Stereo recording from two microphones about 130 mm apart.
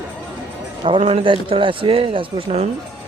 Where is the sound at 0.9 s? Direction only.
45° right (ahead or behind).